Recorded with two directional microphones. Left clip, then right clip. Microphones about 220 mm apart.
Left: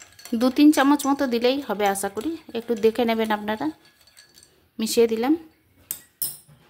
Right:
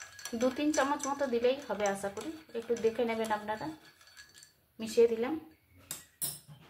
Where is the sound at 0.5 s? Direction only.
50° left (ahead or behind).